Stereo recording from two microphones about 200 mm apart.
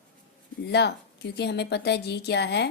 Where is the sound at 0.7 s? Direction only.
55° left (ahead or behind).